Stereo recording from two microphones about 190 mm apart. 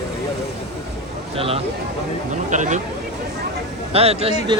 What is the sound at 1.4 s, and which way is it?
Speech, 30° right (ahead or behind).